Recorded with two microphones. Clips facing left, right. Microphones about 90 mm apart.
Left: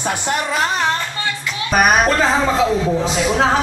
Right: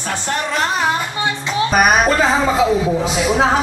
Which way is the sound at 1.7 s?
Centre (ahead or behind).